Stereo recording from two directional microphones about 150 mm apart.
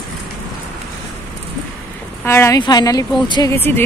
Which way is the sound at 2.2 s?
20° left (ahead or behind).